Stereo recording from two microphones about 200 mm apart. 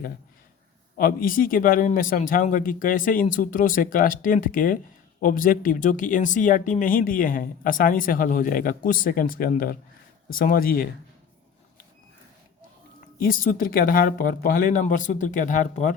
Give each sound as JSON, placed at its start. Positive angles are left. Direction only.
{"t": 0.9, "sound": "speech", "side_deg": 45}
{"t": 13.1, "sound": "speech", "side_deg": 45}